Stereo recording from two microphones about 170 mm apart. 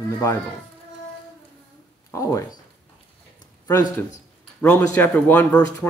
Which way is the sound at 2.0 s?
20° left (ahead or behind).